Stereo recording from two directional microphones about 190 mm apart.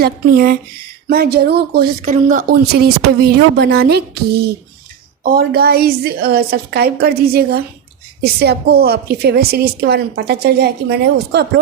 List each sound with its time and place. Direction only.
0.0 s a woman's voice: 50° right (ahead or behind)